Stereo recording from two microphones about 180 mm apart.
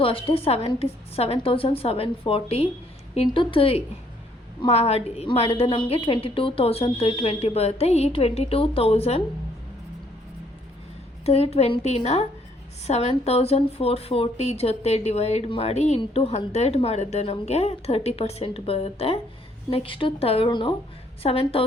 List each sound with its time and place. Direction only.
0.0 s speech: 30° left (ahead or behind)
11.3 s speech: 35° left (ahead or behind)